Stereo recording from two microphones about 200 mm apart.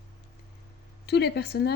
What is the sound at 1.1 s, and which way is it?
Speech, 55° left (ahead or behind).